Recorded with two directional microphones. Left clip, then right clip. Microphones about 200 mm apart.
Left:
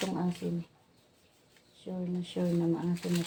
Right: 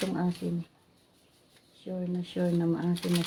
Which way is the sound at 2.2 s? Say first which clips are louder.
Right 2 dB; 15° right (ahead or behind).